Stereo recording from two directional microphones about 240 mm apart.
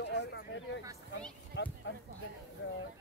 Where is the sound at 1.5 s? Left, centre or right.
Left.